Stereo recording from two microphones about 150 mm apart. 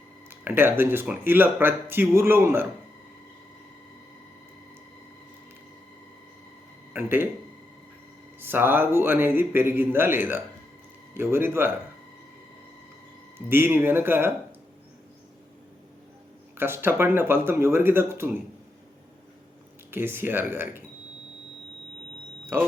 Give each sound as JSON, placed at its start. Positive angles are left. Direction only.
{"t": 0.3, "sound": "speech", "side_deg": -15}
{"t": 6.9, "sound": "speech", "side_deg": -15}
{"t": 8.4, "sound": "speech", "side_deg": -15}
{"t": 13.5, "sound": "speech", "side_deg": -15}
{"t": 16.6, "sound": "speech", "side_deg": -15}
{"t": 19.9, "sound": "speech", "side_deg": -15}
{"t": 22.5, "sound": "speech", "side_deg": -15}